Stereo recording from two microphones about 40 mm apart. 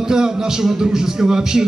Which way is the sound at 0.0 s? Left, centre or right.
Centre.